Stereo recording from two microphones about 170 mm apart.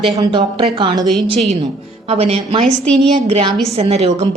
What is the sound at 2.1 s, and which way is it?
Speech, 35° right (ahead or behind).